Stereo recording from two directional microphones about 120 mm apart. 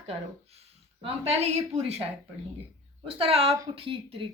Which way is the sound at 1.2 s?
60° right (ahead or behind).